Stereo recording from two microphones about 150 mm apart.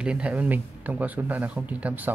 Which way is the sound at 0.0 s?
5° right (ahead or behind).